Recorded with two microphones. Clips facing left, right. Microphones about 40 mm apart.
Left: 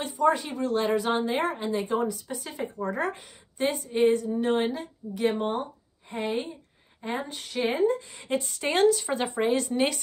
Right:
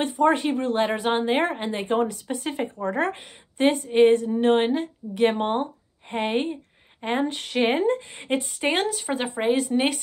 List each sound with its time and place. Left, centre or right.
0.0 s speech: right; by 9.4 s centre
9.4 s speech: right